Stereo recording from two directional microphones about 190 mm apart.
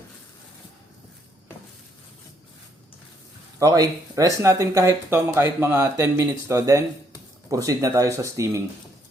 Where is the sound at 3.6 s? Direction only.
20° right (ahead or behind).